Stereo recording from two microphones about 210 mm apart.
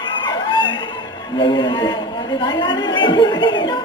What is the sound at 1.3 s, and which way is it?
Music, 20° left (ahead or behind).